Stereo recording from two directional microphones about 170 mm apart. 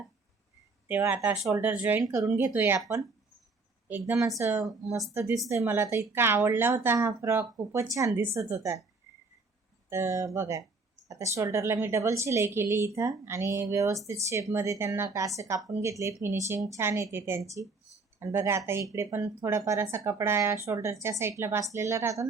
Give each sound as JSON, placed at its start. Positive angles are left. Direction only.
{"t": 0.9, "sound": "speech", "side_deg": -10}
{"t": 2.0, "sound": "speech", "side_deg": -20}
{"t": 9.9, "sound": "speech", "side_deg": -15}